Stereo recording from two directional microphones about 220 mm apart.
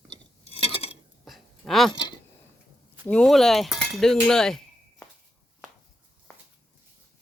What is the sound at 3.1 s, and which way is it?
Cutlery, 5° left (ahead or behind).